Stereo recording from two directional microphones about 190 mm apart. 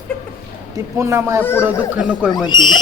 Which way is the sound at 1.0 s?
15° right (ahead or behind).